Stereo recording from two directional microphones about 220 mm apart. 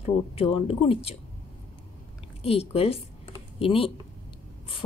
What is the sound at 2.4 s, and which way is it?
A woman's voice, 25° left (ahead or behind).